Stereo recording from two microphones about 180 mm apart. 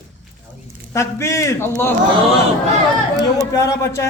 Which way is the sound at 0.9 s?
15° left (ahead or behind).